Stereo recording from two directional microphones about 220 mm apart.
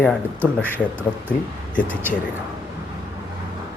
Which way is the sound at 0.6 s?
10° right (ahead or behind).